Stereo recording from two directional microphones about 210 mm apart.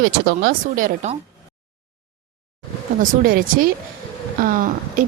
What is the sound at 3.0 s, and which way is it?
A woman's voice, 40° right (ahead or behind).